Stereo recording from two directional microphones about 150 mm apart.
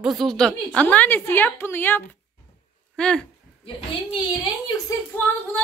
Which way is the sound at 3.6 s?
30° left (ahead or behind).